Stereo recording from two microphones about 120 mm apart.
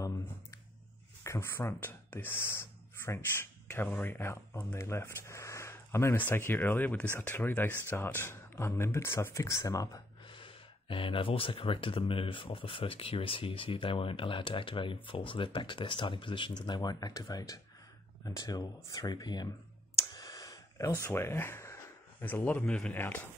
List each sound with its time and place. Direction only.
1.2 s speech: 20° left (ahead or behind)
10.2 s speech: 45° left (ahead or behind)
20.1 s a sound: 30° left (ahead or behind)
22.2 s speech: 15° left (ahead or behind)